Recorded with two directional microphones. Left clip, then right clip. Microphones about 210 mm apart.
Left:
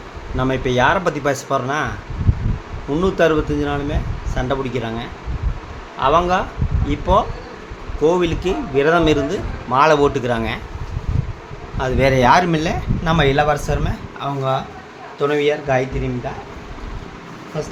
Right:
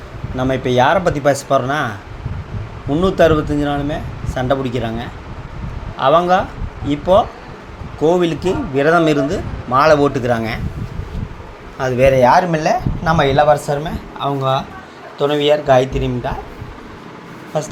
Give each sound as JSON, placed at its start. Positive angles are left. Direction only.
{"t": 0.3, "sound": "a man's voice", "side_deg": -5}
{"t": 2.9, "sound": "a man's voice", "side_deg": -10}
{"t": 11.8, "sound": "speech", "side_deg": 0}
{"t": 12.1, "sound": "speech", "side_deg": 15}
{"t": 13.2, "sound": "a man's voice", "side_deg": 0}